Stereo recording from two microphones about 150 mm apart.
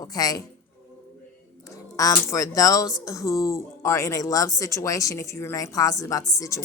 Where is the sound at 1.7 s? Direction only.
20° left (ahead or behind).